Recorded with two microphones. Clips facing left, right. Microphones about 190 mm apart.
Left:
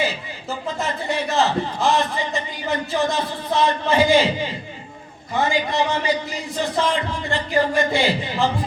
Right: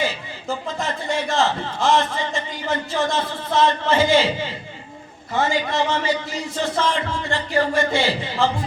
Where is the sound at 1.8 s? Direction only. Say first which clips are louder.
Right 3 dB; 15° left (ahead or behind).